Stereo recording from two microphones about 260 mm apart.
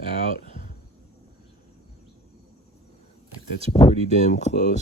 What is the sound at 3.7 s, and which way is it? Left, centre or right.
Speech, left.